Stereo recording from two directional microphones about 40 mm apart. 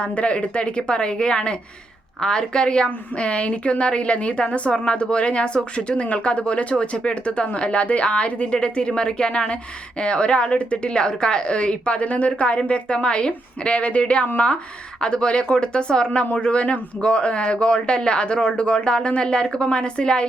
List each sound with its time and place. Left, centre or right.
0.0 s speech: left